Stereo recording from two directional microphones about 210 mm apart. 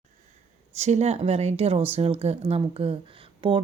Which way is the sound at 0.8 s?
30° right (ahead or behind).